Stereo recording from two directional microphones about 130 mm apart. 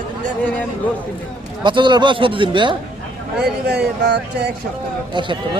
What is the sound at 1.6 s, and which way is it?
Speech, 35° right (ahead or behind).